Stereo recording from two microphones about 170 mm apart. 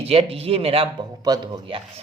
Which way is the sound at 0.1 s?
35° right (ahead or behind).